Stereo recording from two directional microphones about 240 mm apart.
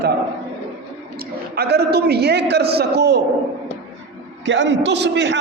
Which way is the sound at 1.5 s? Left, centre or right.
Right.